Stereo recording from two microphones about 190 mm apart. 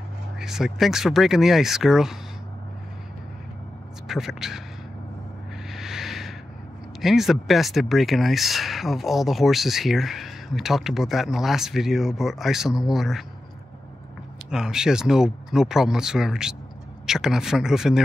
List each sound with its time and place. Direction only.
0.4 s speech: centre (ahead or behind)
4.1 s speech: centre (ahead or behind)
5.7 s a sound: centre (ahead or behind)
7.0 s speech: centre (ahead or behind)
14.5 s speech: 5° right (ahead or behind)